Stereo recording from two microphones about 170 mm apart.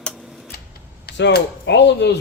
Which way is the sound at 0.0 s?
5° left (ahead or behind).